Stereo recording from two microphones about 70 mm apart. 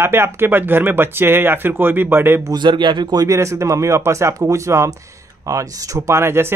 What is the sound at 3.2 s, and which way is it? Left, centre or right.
Speech, right.